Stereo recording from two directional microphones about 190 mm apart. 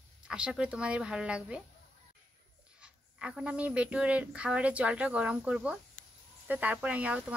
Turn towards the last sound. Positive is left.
turn(degrees=-5)  # may be behind; listen again after turning